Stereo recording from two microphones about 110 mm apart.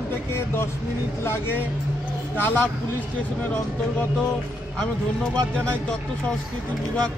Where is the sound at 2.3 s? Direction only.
20° left (ahead or behind).